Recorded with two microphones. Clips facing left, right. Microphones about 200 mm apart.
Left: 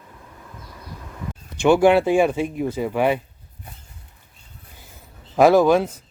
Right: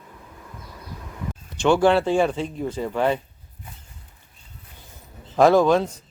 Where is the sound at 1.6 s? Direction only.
10° left (ahead or behind).